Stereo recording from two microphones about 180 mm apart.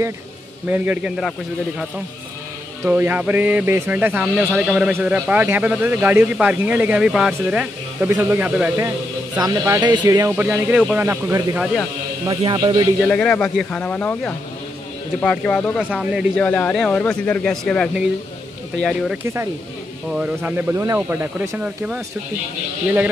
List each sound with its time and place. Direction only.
0.7 s speech: 10° right (ahead or behind)
2.8 s speech: 10° right (ahead or behind)
4.5 s speech: centre (ahead or behind); by 12.8 s 25° right (ahead or behind)
13.0 s speech: 5° left (ahead or behind)
16.3 s speech: 5° left (ahead or behind)